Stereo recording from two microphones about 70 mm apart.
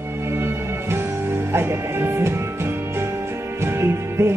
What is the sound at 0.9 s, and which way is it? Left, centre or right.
Music, right.